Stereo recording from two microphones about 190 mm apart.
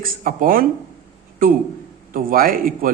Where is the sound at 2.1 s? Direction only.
50° right (ahead or behind).